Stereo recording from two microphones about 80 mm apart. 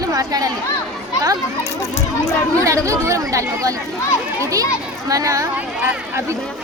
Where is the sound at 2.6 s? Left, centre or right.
Right.